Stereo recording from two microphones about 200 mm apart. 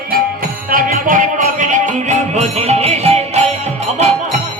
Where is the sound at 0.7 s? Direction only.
45° right (ahead or behind).